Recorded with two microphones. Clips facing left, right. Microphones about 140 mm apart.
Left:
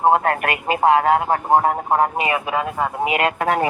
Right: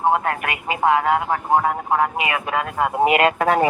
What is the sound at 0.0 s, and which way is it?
Speech, 40° left (ahead or behind).